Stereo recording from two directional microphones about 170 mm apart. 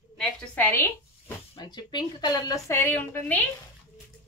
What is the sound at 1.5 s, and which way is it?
A woman's voice, 25° left (ahead or behind).